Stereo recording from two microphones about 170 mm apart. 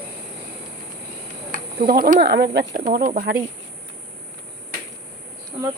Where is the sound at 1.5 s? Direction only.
55° right (ahead or behind).